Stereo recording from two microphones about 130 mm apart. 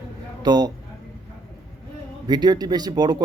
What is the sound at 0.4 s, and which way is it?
Speech, 30° right (ahead or behind).